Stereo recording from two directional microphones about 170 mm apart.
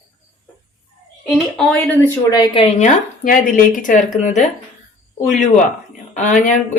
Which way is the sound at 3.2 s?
50° left (ahead or behind).